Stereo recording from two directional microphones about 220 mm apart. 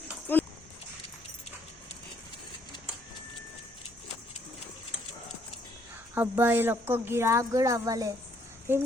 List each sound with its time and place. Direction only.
0.3 s horse: 10° left (ahead or behind)
6.1 s speech: 10° right (ahead or behind)